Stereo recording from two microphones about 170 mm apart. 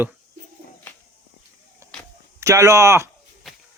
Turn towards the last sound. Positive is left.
turn(degrees=0)  # may be behind; listen again after turning